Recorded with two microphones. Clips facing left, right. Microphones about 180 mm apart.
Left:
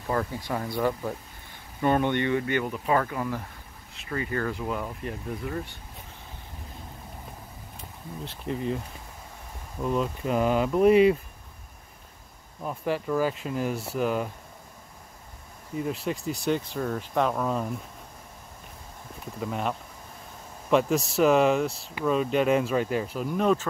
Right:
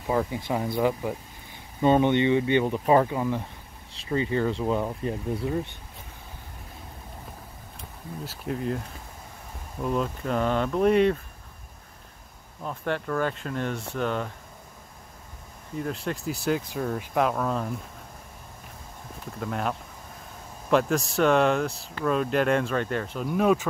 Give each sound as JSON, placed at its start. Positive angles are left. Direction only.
{"t": 0.0, "sound": "speech", "side_deg": -10}
{"t": 8.2, "sound": "speech", "side_deg": -5}
{"t": 12.6, "sound": "speech", "side_deg": 5}
{"t": 15.8, "sound": "speech", "side_deg": 0}
{"t": 19.4, "sound": "speech", "side_deg": 0}
{"t": 20.7, "sound": "speech", "side_deg": 0}